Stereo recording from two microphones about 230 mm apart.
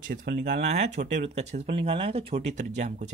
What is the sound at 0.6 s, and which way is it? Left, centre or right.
Speech, right.